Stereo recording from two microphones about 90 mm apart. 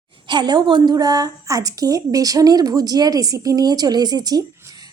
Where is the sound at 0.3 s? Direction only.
55° right (ahead or behind).